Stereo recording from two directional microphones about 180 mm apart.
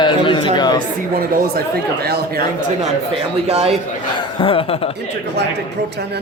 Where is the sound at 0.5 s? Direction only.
25° left (ahead or behind).